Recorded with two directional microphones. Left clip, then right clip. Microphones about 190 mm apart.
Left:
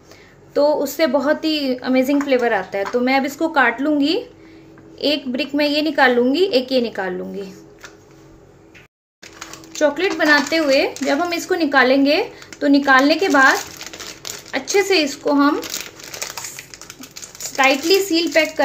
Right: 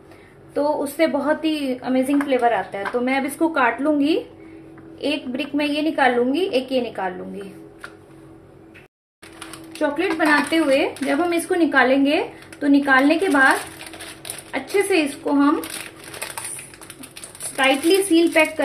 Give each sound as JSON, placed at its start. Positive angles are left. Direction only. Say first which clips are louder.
{"t": 0.6, "sound": "speech", "louder": "left 4 dB", "side_deg": 40}
{"t": 9.8, "sound": "speech", "louder": "left 4 dB", "side_deg": 35}
{"t": 14.5, "sound": "speech", "louder": "left 3 dB", "side_deg": 30}
{"t": 17.6, "sound": "speech", "louder": "left 2 dB", "side_deg": 30}